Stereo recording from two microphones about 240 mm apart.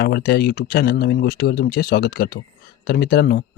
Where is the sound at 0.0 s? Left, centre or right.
Left.